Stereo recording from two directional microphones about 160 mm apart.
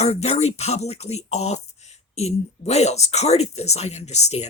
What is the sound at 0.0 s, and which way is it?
Speech, 40° left (ahead or behind).